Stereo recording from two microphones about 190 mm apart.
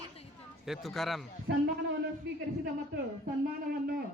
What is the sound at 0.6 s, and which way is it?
Speech, centre (ahead or behind).